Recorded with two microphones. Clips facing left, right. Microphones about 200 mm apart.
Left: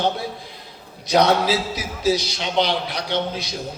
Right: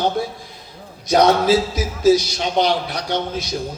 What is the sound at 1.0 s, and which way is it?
A man's voice, 50° right (ahead or behind).